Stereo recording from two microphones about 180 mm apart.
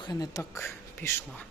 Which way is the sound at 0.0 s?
20° left (ahead or behind).